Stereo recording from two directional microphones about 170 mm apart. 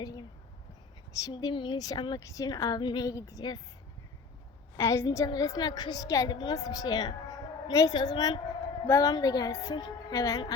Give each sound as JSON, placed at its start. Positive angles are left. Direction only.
{"t": 0.0, "sound": "a sound", "side_deg": 20}
{"t": 1.2, "sound": "a woman's voice", "side_deg": 25}
{"t": 4.8, "sound": "a woman's voice", "side_deg": 15}